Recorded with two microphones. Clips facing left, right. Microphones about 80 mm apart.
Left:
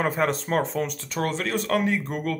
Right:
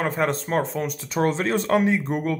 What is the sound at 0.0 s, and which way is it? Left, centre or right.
Speech, centre.